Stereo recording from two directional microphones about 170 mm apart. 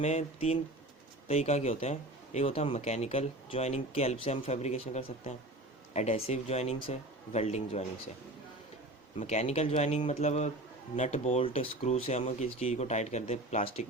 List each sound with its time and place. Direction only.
0.0 s speech: 40° left (ahead or behind)
9.1 s speech: 40° left (ahead or behind)